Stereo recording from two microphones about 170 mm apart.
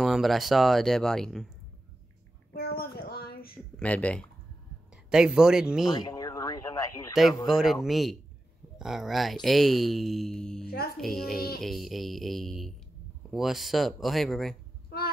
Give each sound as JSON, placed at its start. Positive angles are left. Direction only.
{"t": 0.0, "sound": "speech", "side_deg": 0}
{"t": 2.5, "sound": "a sound", "side_deg": 60}
{"t": 3.7, "sound": "speech", "side_deg": 10}
{"t": 5.1, "sound": "speech", "side_deg": -5}
{"t": 5.9, "sound": "radio", "side_deg": 20}
{"t": 7.4, "sound": "speech", "side_deg": 0}